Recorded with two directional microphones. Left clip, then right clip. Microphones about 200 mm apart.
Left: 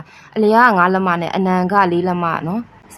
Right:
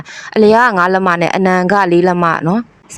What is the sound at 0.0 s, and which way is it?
Speech, 35° right (ahead or behind).